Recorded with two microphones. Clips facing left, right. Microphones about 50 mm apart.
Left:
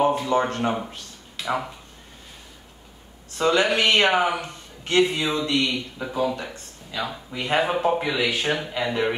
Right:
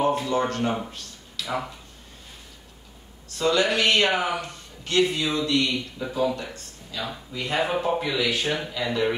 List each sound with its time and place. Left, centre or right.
0.0 s a sound: left
0.7 s speech: centre
1.4 s a sound: left
3.3 s a man's voice: left
6.0 s speech: centre
6.3 s a man's voice: left